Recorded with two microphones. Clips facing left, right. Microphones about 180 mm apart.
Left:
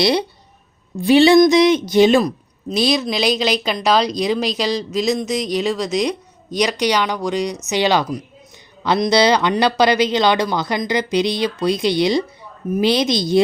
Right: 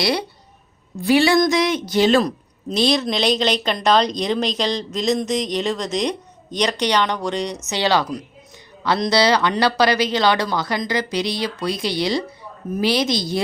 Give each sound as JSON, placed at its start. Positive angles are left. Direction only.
{"t": 0.0, "sound": "speech", "side_deg": 20}